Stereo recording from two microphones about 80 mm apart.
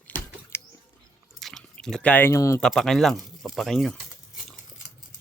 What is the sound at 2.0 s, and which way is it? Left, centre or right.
Speech, centre.